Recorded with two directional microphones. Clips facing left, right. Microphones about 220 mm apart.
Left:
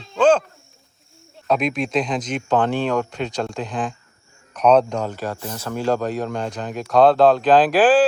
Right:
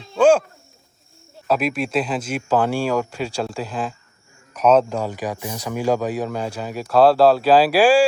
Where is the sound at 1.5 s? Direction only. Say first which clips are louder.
Even; 5° right (ahead or behind).